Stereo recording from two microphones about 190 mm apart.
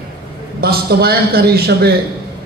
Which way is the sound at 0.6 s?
55° right (ahead or behind).